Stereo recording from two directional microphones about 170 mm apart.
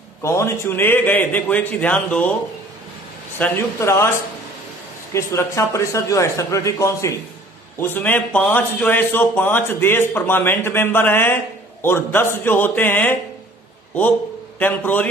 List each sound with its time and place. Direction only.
0.2 s speech: 15° left (ahead or behind)
3.3 s speech: 10° left (ahead or behind)
5.1 s speech: 15° left (ahead or behind)
14.6 s speech: 10° left (ahead or behind)